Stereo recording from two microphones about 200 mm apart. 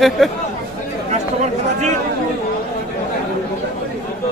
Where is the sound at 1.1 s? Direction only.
35° right (ahead or behind).